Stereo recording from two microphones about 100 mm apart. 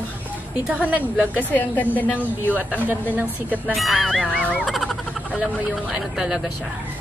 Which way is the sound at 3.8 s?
Centre (ahead or behind).